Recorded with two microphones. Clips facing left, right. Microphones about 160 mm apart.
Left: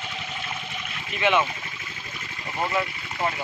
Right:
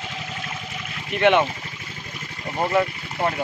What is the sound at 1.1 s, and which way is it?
Speech, 60° right (ahead or behind).